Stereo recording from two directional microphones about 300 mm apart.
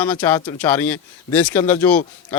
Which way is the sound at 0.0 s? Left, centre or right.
Centre.